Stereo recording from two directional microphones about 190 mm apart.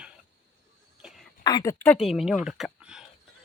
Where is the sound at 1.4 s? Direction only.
20° left (ahead or behind).